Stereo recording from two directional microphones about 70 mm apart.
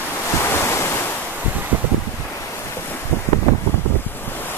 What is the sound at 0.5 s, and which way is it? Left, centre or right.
Waves, left.